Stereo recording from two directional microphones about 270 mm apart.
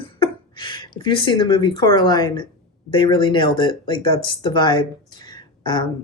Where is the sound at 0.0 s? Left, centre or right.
Centre.